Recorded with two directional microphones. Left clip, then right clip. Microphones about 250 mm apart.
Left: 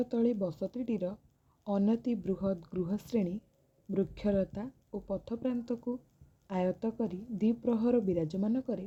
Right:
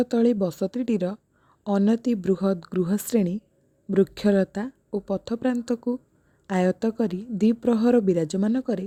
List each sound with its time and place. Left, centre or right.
0.0 s speech: right